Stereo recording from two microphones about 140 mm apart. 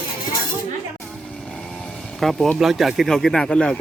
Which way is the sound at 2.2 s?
Centre (ahead or behind).